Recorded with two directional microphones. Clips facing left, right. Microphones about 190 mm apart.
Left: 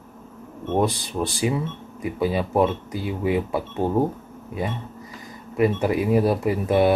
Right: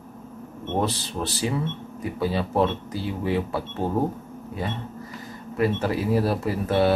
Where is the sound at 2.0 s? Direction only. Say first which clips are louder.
Left 3 dB; 15° left (ahead or behind).